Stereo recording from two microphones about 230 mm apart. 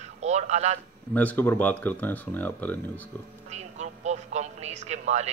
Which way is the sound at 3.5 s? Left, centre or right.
Right.